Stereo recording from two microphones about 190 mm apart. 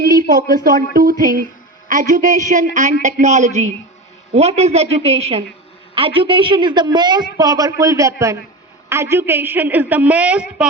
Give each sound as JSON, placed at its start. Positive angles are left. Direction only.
{"t": 0.0, "sound": "a woman's voice", "side_deg": -50}